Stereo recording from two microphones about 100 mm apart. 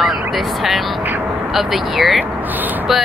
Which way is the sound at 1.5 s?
Centre (ahead or behind).